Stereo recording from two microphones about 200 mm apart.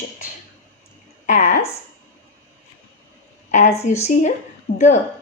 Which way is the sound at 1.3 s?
40° left (ahead or behind).